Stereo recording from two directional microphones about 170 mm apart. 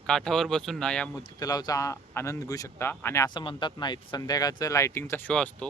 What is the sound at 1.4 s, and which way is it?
Speech, 20° left (ahead or behind).